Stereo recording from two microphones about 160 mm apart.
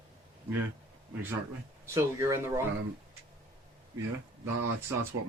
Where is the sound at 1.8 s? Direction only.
20° right (ahead or behind).